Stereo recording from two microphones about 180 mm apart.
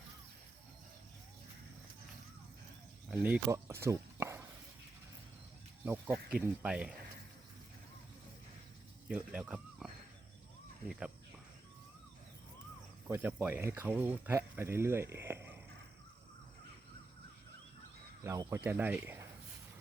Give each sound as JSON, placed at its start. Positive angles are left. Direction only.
{"t": 3.1, "sound": "speech", "side_deg": -10}
{"t": 3.8, "sound": "a sound", "side_deg": -15}
{"t": 5.8, "sound": "speech", "side_deg": -5}
{"t": 9.0, "sound": "speech", "side_deg": -5}
{"t": 13.1, "sound": "speech", "side_deg": -10}
{"t": 18.2, "sound": "speech", "side_deg": -20}